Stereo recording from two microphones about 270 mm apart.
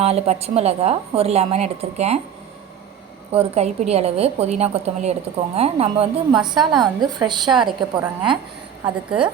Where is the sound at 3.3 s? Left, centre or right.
Right.